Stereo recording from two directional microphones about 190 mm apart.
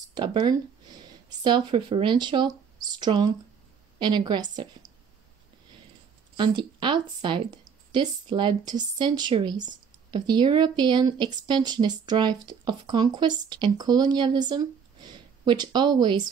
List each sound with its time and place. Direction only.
0.1 s speech: 25° right (ahead or behind)
6.3 s speech: 25° right (ahead or behind)